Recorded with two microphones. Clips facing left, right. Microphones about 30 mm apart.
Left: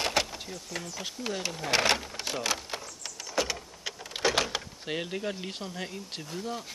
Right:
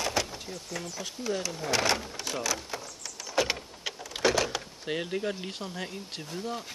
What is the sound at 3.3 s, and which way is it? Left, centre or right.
Vehicle, right.